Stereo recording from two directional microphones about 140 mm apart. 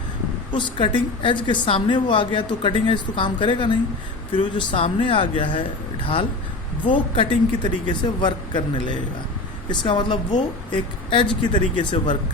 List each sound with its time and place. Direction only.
0.5 s a woman's voice: 35° left (ahead or behind)
6.9 s a woman's voice: 35° left (ahead or behind)